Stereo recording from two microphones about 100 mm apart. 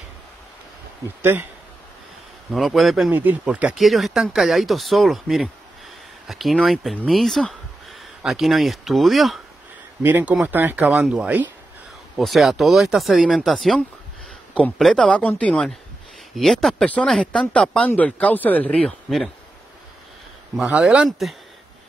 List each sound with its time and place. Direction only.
1.2 s speech: 20° right (ahead or behind)
2.5 s speech: centre (ahead or behind)
3.1 s speech: 15° right (ahead or behind); by 7.0 s centre (ahead or behind)
7.1 s a sound: centre (ahead or behind)
8.2 s speech: 5° right (ahead or behind)
10.0 s speech: 20° right (ahead or behind)
12.2 s speech: centre (ahead or behind)
19.0 s speech: centre (ahead or behind)
20.5 s speech: 5° right (ahead or behind)